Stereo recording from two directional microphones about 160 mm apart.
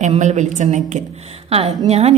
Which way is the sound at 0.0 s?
45° right (ahead or behind).